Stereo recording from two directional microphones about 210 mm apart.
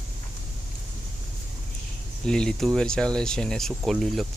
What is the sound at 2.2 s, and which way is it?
Speech, 5° left (ahead or behind).